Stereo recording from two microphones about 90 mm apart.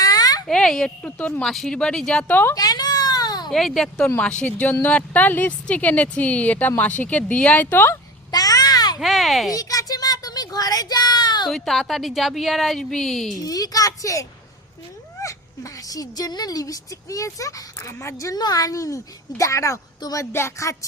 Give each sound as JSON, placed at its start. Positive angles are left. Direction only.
{"t": 0.0, "sound": "a sound", "side_deg": 45}
{"t": 0.4, "sound": "speech", "side_deg": 5}
{"t": 2.6, "sound": "a sound", "side_deg": 45}
{"t": 3.5, "sound": "a woman's voice", "side_deg": 5}
{"t": 8.3, "sound": "babbling", "side_deg": 45}
{"t": 9.0, "sound": "a woman's voice", "side_deg": 0}
{"t": 9.5, "sound": "a sound", "side_deg": 40}
{"t": 11.4, "sound": "a woman's voice", "side_deg": 5}
{"t": 13.4, "sound": "speech", "side_deg": 45}
{"t": 18.3, "sound": "speech", "side_deg": 45}